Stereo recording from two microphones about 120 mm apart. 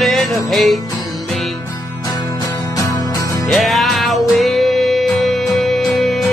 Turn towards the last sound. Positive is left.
turn(degrees=0)  # may be behind; listen again after turning